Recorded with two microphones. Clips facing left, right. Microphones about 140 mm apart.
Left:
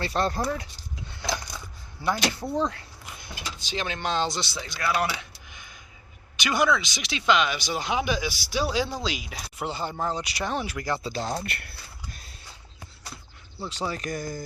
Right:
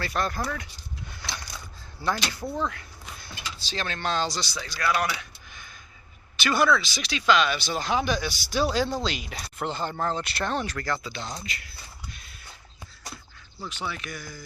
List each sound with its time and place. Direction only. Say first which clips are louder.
0.0 s speech: left 3 dB; 30° left (ahead or behind)
5.5 s a sound: even; 15° left (ahead or behind)
6.3 s speech: right 1 dB; 15° left (ahead or behind)
11.0 s speech: left 6 dB; 40° left (ahead or behind); by 11.8 s 60° left (ahead or behind)
13.6 s speech: left 3 dB; 35° left (ahead or behind)